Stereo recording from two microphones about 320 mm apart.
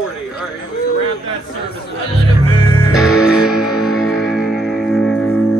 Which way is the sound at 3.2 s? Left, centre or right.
Centre.